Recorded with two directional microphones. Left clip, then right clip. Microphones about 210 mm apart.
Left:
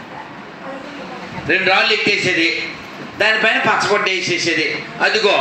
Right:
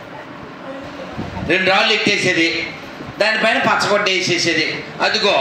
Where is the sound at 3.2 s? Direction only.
20° right (ahead or behind).